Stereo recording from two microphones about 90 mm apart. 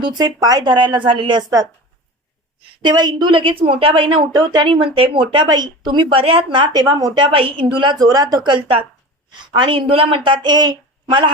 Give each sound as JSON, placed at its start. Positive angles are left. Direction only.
{"t": 0.0, "sound": "speech", "side_deg": -50}
{"t": 1.4, "sound": "speech", "side_deg": -45}
{"t": 2.8, "sound": "speech", "side_deg": -50}
{"t": 3.6, "sound": "a woman's voice", "side_deg": -90}
{"t": 4.4, "sound": "speech", "side_deg": -50}
{"t": 6.7, "sound": "a woman's voice", "side_deg": -40}
{"t": 7.1, "sound": "a woman's voice", "side_deg": -75}
{"t": 7.9, "sound": "speech", "side_deg": -45}